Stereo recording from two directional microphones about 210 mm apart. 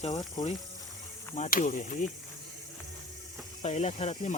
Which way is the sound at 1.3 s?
35° left (ahead or behind).